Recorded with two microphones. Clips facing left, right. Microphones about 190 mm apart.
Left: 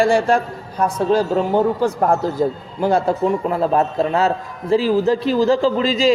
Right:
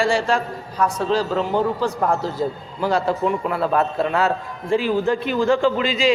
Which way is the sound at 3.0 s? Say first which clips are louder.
Left 3 dB; 40° left (ahead or behind).